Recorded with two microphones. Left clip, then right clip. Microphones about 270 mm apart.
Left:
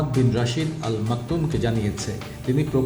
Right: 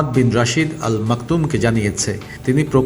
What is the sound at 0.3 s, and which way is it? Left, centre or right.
A man's voice, centre.